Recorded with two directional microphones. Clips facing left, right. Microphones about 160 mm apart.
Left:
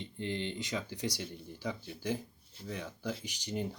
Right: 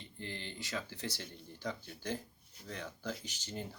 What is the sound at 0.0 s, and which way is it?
Speech, 20° left (ahead or behind).